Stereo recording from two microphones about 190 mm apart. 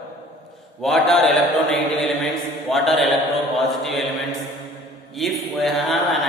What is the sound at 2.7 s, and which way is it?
Speech, centre (ahead or behind).